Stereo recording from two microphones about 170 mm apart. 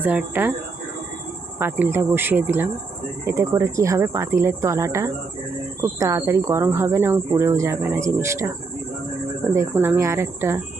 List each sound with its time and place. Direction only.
0.0 s speech: 10° right (ahead or behind)
1.5 s speech: 10° right (ahead or behind)